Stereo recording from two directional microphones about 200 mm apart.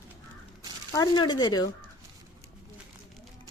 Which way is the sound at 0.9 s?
20° left (ahead or behind).